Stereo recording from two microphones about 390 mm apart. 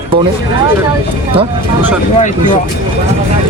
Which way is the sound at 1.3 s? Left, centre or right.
Centre.